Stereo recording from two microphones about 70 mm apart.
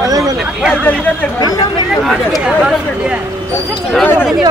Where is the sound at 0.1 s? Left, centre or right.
Right.